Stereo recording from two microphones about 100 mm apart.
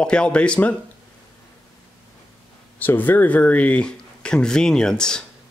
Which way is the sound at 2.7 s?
20° left (ahead or behind).